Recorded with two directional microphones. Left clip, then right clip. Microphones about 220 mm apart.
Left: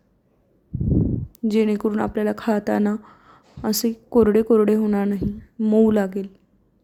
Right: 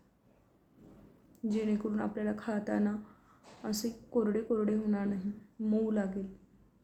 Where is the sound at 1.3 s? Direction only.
45° left (ahead or behind).